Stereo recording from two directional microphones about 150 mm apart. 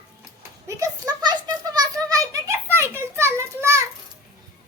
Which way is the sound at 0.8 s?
25° right (ahead or behind).